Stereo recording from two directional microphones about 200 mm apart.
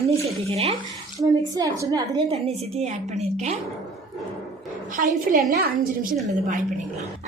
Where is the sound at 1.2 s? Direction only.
15° right (ahead or behind).